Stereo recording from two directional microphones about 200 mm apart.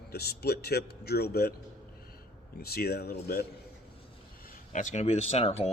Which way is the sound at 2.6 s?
50° left (ahead or behind).